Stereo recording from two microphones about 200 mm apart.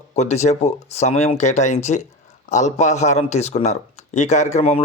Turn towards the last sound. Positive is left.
turn(degrees=30)  # may be behind; listen again after turning